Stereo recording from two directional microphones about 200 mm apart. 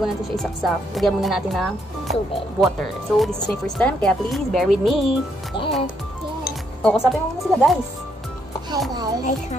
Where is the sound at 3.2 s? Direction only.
5° left (ahead or behind).